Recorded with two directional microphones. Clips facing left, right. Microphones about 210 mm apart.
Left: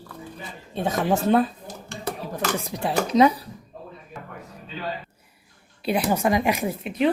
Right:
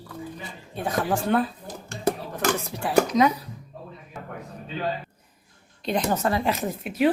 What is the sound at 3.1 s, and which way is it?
Speech, 30° left (ahead or behind).